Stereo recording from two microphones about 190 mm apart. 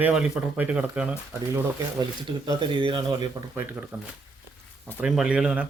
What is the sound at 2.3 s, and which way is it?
Speech, 25° right (ahead or behind).